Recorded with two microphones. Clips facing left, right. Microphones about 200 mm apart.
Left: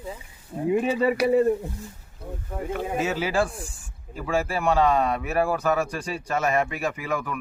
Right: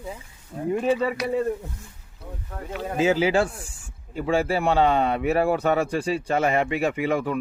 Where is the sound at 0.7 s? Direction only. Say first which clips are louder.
Even; 5° left (ahead or behind).